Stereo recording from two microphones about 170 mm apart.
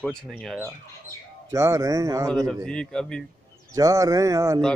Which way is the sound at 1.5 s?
15° right (ahead or behind).